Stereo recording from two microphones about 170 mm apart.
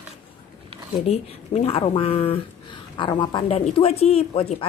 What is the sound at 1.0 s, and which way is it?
Speech, 40° left (ahead or behind).